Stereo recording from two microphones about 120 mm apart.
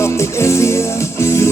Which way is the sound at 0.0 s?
25° left (ahead or behind).